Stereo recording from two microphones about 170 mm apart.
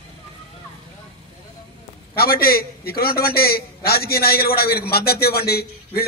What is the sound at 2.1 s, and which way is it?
A man's voice, 60° left (ahead or behind).